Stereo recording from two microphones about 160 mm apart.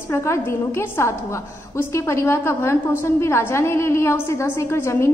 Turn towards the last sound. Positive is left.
turn(degrees=15)  # may be behind; listen again after turning